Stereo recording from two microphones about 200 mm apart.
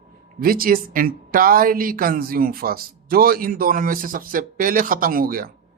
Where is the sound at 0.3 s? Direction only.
45° right (ahead or behind).